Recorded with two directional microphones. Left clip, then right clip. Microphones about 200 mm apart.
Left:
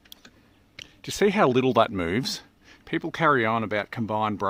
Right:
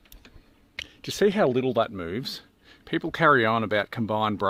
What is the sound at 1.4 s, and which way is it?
Speech, 25° left (ahead or behind).